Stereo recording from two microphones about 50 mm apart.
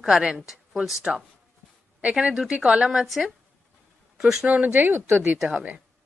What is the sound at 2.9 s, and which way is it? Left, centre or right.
A woman's voice, centre.